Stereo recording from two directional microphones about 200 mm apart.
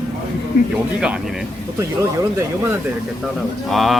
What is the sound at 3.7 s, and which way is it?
Speech, centre (ahead or behind).